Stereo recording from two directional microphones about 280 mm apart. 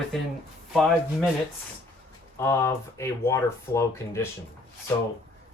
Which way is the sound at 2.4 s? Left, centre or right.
Centre.